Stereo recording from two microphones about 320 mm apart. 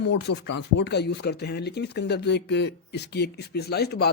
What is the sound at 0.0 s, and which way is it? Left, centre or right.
Speech, left.